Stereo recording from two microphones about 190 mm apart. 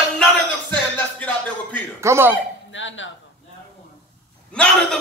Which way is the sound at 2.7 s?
80° left.